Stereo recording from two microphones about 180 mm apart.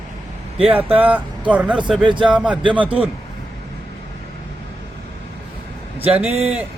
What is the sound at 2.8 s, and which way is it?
Speech, 30° right (ahead or behind).